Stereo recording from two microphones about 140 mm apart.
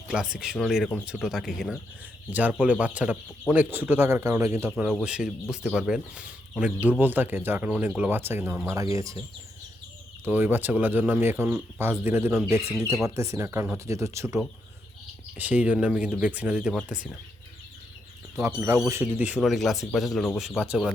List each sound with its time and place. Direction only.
0.1 s speech: 5° right (ahead or behind)
5.0 s speech: 5° right (ahead or behind); by 9.2 s 25° right (ahead or behind)
10.2 s speech: 15° right (ahead or behind)
15.4 s speech: 10° right (ahead or behind)
18.9 s speech: 15° right (ahead or behind)